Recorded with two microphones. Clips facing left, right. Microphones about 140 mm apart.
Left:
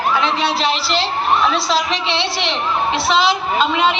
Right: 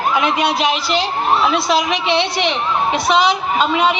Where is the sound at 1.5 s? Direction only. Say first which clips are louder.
Right 2 dB; 50° right (ahead or behind).